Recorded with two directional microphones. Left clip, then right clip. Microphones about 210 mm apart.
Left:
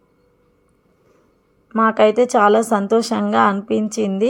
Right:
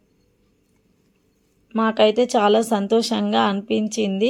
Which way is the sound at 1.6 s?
5° left (ahead or behind).